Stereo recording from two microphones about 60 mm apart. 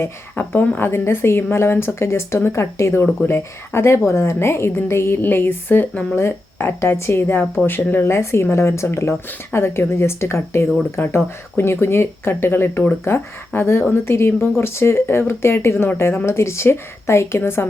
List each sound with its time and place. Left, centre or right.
0.0 s a woman's voice: left
5.9 s speech: centre
6.1 s a woman's voice: left
8.1 s a woman's voice: left